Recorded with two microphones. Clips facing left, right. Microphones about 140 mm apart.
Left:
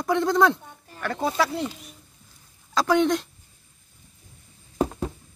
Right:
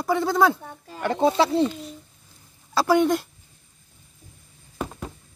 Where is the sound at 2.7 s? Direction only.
5° right (ahead or behind).